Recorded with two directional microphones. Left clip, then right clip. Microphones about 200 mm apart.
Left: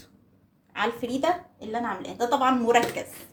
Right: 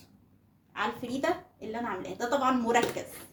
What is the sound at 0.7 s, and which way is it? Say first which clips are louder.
Speech: left 5 dB; 45° left (ahead or behind).